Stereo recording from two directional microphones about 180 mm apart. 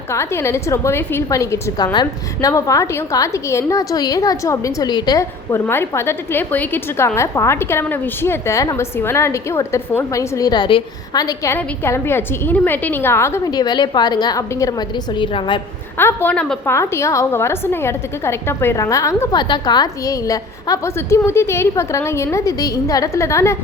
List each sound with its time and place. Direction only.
0.1 s a woman's voice: 15° left (ahead or behind)
16.0 s a woman's voice: 10° left (ahead or behind)